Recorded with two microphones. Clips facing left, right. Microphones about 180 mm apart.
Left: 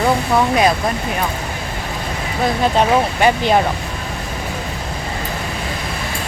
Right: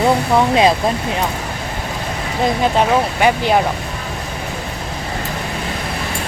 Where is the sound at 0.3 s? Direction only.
25° right (ahead or behind).